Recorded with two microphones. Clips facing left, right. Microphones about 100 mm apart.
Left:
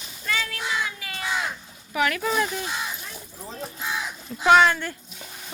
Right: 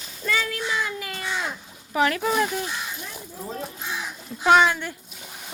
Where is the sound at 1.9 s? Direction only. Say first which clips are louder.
Right 2 dB; 30° right (ahead or behind).